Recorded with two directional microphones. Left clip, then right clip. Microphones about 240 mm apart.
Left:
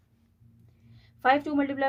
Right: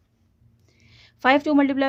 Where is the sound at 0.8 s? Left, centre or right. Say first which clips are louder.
Right 5 dB; right.